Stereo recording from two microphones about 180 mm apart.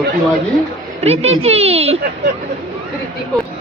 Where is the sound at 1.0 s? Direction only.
35° right (ahead or behind).